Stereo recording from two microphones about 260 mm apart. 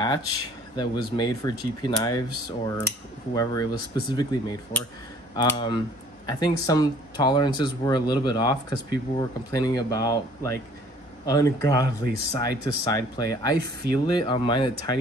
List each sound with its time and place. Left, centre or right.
0.7 s speech: centre